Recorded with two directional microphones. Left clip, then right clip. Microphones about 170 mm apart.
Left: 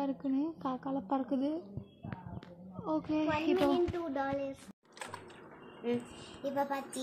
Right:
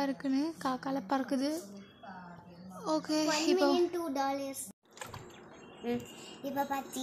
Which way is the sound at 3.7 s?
40° right (ahead or behind).